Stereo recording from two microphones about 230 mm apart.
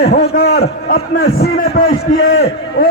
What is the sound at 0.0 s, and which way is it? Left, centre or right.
A man's voice, left.